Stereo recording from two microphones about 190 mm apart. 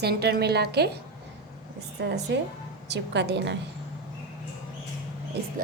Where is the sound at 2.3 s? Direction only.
65° right (ahead or behind).